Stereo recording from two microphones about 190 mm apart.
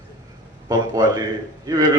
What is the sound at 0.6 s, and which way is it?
Speech, 20° right (ahead or behind).